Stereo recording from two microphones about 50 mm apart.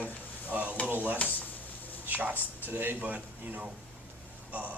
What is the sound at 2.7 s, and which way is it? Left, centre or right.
Speech, right.